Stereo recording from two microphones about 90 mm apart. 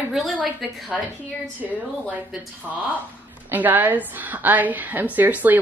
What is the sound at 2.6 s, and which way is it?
Speech, 5° right (ahead or behind).